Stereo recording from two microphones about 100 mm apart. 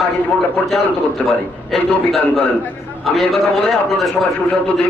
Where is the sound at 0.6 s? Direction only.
15° left (ahead or behind).